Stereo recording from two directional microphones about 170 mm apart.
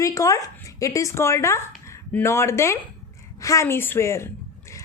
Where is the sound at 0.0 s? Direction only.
20° left (ahead or behind).